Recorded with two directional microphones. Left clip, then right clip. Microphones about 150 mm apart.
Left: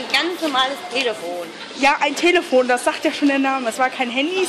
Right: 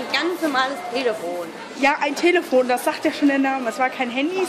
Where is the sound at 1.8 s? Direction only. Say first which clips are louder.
Left 2 dB; 35° left (ahead or behind).